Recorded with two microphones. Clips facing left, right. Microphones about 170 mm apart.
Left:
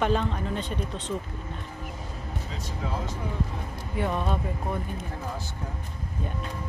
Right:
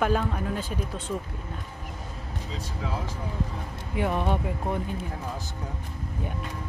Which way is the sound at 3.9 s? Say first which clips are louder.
Right 2 dB; 15° right (ahead or behind).